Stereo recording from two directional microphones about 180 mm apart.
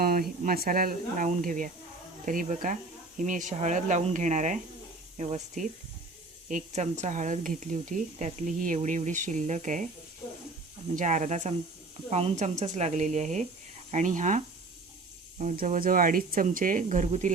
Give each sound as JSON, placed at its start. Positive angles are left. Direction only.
{"t": 0.0, "sound": "speech", "side_deg": -55}
{"t": 10.9, "sound": "speech", "side_deg": -45}